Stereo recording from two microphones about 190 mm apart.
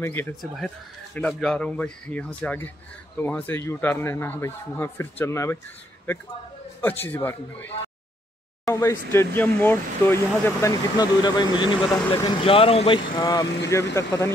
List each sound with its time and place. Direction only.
0.0 s a man's voice: 10° left (ahead or behind)
6.8 s a man's voice: 10° left (ahead or behind)